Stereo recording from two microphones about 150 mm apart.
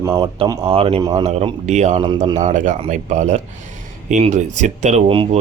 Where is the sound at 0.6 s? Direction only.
40° right (ahead or behind).